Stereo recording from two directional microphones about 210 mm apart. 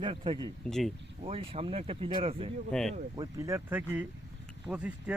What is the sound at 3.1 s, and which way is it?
Speech, 15° right (ahead or behind).